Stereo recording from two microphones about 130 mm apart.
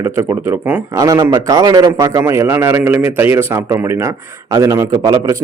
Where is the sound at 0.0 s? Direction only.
20° right (ahead or behind).